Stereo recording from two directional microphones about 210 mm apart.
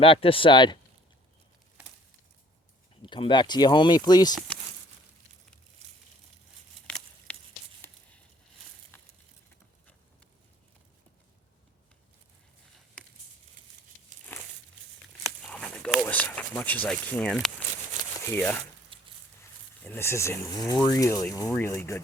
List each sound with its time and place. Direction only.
0.0 s speech: 25° left (ahead or behind)
3.0 s speech: 25° left (ahead or behind)
6.8 s a sound: 5° left (ahead or behind)
8.9 s crushing: 10° left (ahead or behind)
14.3 s crumpling: 10° left (ahead or behind)
15.4 s a sound: 5° left (ahead or behind)
18.3 s speech: 10° left (ahead or behind)
18.9 s a sound: 25° right (ahead or behind)
19.4 s speech: 10° left (ahead or behind)